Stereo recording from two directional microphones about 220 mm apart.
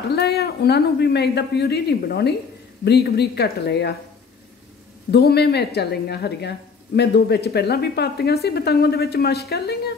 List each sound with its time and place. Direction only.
0.1 s a woman's voice: 45° left (ahead or behind)
5.1 s a woman's voice: 45° left (ahead or behind)